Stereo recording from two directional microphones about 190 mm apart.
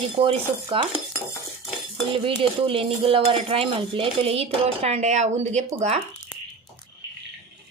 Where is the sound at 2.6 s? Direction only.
30° right (ahead or behind).